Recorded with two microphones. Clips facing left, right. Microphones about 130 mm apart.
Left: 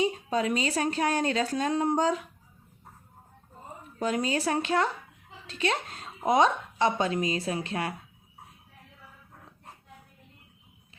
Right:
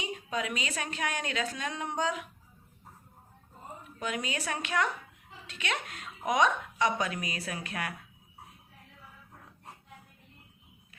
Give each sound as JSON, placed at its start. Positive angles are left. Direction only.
{"t": 0.0, "sound": "a woman's voice", "side_deg": 35}
{"t": 4.0, "sound": "a woman's voice", "side_deg": 35}